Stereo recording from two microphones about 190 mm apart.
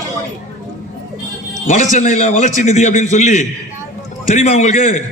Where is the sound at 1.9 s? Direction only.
40° left (ahead or behind).